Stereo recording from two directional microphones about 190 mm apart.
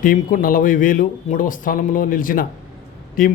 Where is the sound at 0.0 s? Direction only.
45° left (ahead or behind).